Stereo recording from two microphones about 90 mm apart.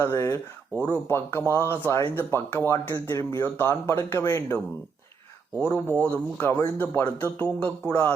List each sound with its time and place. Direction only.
0.0 s speech: 30° left (ahead or behind)
3.4 s speech: 20° left (ahead or behind)
5.5 s music: 15° left (ahead or behind)
6.0 s speech: 20° left (ahead or behind)
7.6 s music: 15° left (ahead or behind)